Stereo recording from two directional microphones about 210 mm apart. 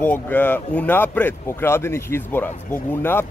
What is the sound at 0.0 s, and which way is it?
Speech, 5° left (ahead or behind).